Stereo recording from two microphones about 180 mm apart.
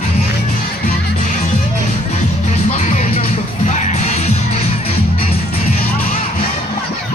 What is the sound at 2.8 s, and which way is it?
Music, 45° left (ahead or behind).